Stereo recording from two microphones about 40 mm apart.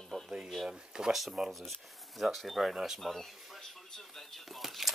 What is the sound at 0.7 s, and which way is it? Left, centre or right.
Speech, centre.